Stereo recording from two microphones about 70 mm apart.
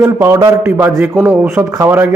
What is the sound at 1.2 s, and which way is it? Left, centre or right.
Speech, centre.